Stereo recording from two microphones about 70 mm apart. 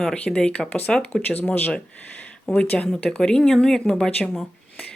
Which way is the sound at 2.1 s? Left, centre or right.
Left.